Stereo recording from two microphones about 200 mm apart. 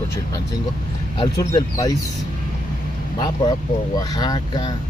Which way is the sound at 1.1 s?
20° left (ahead or behind).